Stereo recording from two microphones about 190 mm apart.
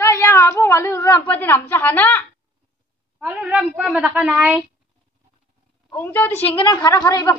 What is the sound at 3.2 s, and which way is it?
A woman's voice, 10° right (ahead or behind).